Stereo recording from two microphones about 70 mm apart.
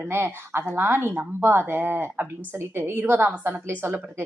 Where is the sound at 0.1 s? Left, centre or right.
Right.